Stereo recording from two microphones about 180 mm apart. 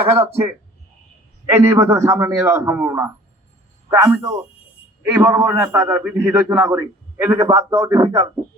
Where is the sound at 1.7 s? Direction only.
15° right (ahead or behind).